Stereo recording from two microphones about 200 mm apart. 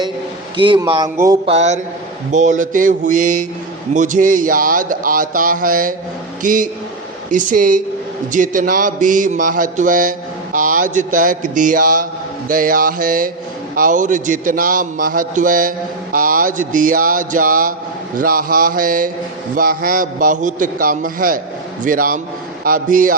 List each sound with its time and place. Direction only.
0.5 s a man's voice: 25° right (ahead or behind)
1.5 s mantra: 35° right (ahead or behind)
3.9 s speech: 40° right (ahead or behind)
6.4 s mantra: 40° right (ahead or behind)
8.3 s speech: 40° right (ahead or behind)